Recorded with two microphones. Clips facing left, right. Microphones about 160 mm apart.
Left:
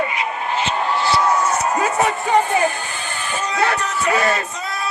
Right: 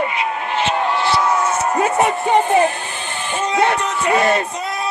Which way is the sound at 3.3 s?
25° right (ahead or behind).